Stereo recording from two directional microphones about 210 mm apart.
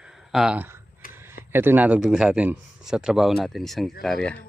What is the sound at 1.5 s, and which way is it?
Speech, 10° right (ahead or behind).